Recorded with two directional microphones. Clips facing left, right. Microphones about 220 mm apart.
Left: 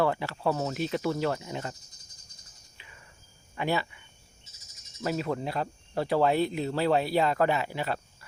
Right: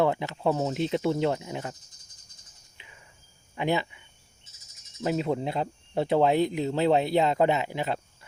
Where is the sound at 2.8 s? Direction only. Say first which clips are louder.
Right 1 dB; 20° right (ahead or behind).